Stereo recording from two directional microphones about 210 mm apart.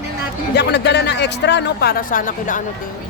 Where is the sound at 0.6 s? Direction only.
55° left (ahead or behind).